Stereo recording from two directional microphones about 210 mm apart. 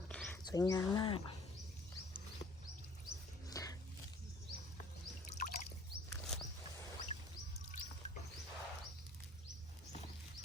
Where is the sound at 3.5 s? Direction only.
15° left (ahead or behind).